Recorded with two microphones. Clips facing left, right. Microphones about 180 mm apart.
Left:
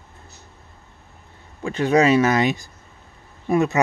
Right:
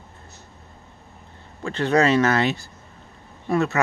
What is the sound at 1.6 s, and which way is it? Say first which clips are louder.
Speech: left 2 dB; 10° left (ahead or behind).